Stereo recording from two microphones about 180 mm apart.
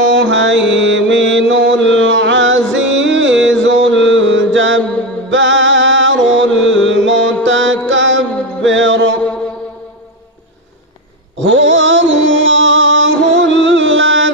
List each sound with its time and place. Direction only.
0.1 s mantra: 85° right
4.1 s music: 90° right
11.3 s music: 90° right